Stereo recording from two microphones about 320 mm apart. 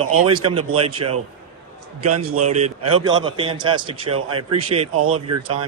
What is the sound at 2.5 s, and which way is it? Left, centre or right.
A man's voice, right.